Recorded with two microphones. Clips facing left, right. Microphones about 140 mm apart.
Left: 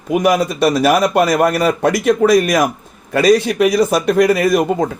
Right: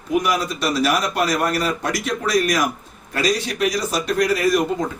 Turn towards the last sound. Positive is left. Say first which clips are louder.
# left 5 dB
turn(degrees=55)  # may be behind; listen again after turning